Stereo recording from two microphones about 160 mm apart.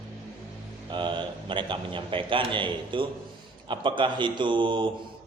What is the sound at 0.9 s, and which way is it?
A man's voice, 30° right (ahead or behind).